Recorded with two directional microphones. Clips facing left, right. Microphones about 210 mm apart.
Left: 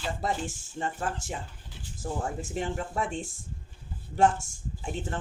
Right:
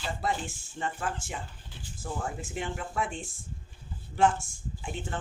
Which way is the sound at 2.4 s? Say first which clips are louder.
Left 3 dB; 40° left (ahead or behind).